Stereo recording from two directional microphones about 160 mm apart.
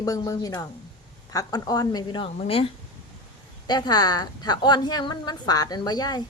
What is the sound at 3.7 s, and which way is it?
A woman's voice, 25° left (ahead or behind).